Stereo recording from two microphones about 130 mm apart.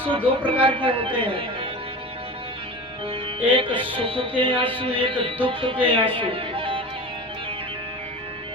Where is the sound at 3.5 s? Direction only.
40° right (ahead or behind).